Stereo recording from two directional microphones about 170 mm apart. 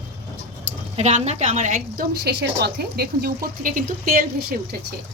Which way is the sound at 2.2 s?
75° right (ahead or behind).